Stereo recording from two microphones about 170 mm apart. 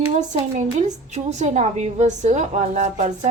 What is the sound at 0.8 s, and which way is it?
A woman's voice, 40° right (ahead or behind).